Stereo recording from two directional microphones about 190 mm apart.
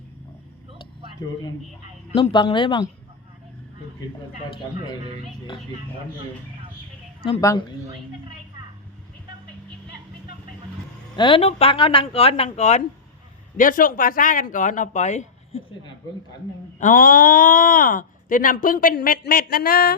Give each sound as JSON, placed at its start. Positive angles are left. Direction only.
{"t": 1.2, "sound": "a man's voice", "side_deg": 15}
{"t": 11.2, "sound": "speech", "side_deg": 30}
{"t": 16.8, "sound": "speech", "side_deg": 45}